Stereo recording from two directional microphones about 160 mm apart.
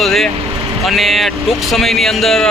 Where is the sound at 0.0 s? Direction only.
Centre (ahead or behind).